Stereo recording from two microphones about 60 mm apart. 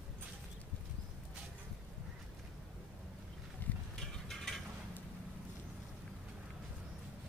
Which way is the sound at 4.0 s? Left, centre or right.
Centre.